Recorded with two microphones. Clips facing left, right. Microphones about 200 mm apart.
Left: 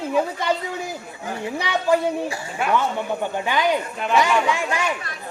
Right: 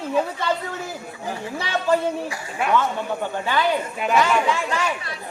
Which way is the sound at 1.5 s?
15° left (ahead or behind).